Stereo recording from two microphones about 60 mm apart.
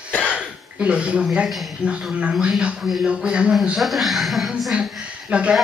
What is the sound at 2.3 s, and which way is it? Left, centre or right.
Speech, centre.